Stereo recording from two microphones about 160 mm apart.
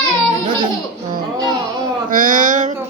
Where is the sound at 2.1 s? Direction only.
55° right (ahead or behind).